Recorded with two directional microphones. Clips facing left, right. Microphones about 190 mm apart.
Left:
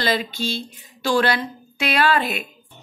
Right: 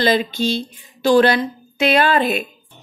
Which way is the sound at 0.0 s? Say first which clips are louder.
Right 6 dB; 20° right (ahead or behind).